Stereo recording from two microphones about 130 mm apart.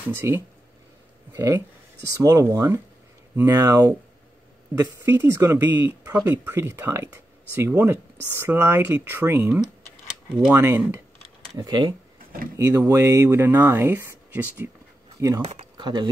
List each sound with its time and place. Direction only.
0.1 s speech: 20° right (ahead or behind)
11.5 s speech: 35° right (ahead or behind)
12.5 s speech: 20° right (ahead or behind)
15.4 s speech: 55° right (ahead or behind)
15.8 s speech: 35° right (ahead or behind)